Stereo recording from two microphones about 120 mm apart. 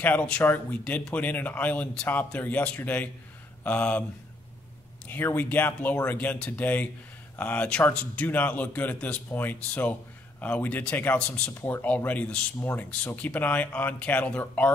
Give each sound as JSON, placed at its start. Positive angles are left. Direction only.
{"t": 0.0, "sound": "speech", "side_deg": 10}
{"t": 5.0, "sound": "speech", "side_deg": 15}